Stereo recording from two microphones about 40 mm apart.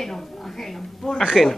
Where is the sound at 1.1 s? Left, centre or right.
Centre.